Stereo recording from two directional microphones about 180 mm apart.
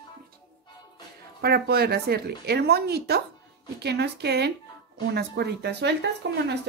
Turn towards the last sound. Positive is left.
turn(degrees=-70)  # may be behind; listen again after turning